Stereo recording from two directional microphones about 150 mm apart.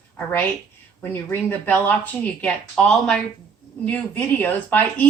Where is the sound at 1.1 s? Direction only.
15° left (ahead or behind).